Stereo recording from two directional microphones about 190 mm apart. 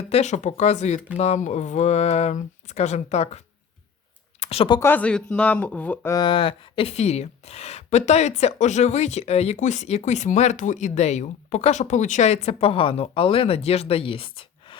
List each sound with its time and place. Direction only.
0.1 s speech: 35° left (ahead or behind)
4.4 s a sound: 30° left (ahead or behind)
4.8 s speech: 10° left (ahead or behind); by 14.8 s 30° left (ahead or behind)